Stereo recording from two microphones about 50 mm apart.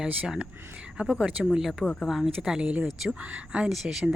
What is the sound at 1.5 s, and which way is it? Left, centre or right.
Speech, centre.